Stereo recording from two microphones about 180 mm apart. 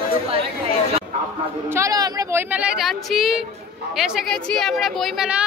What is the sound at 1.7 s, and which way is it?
A woman's voice, 15° right (ahead or behind).